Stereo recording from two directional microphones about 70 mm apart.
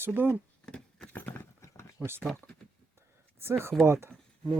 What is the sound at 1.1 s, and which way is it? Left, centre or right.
Horse, left.